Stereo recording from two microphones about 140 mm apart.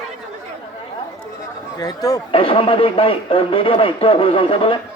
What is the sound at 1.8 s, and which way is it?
Speech, 25° left (ahead or behind).